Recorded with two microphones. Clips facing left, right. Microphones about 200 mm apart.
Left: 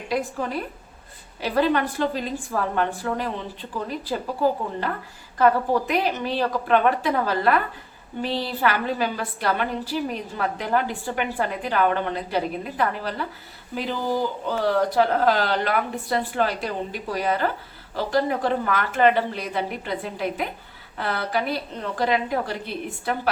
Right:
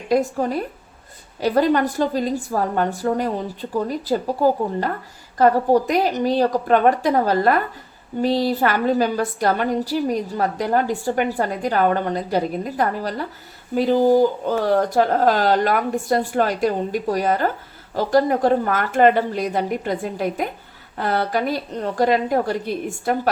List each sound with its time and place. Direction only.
0.1 s a woman's voice: 40° right (ahead or behind)
5.4 s a woman's voice: 40° right (ahead or behind)